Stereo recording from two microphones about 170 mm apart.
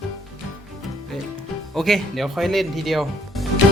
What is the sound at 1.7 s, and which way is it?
Speech, centre (ahead or behind).